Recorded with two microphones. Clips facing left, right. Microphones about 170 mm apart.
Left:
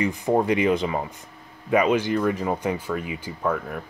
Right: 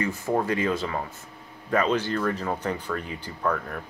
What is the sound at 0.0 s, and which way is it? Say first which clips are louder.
Speech: left 4 dB; 15° left (ahead or behind).